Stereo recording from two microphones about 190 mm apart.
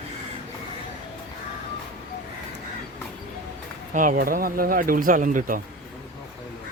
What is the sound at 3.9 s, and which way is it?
Speech, 45° right (ahead or behind).